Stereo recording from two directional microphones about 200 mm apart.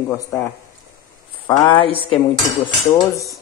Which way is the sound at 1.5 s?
25° left (ahead or behind).